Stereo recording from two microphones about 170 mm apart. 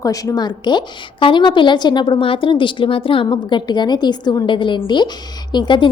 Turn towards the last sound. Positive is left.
turn(degrees=30)  # may be behind; listen again after turning